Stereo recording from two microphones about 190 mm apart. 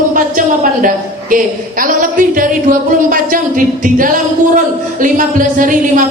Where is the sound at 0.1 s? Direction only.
45° right (ahead or behind).